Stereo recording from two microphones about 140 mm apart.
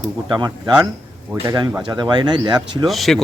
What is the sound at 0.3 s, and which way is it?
Speech, 30° right (ahead or behind).